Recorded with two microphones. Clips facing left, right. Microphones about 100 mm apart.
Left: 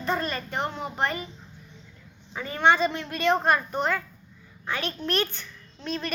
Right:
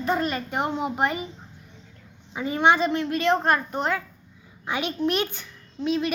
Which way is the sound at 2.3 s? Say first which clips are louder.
Right 2 dB; 10° right (ahead or behind).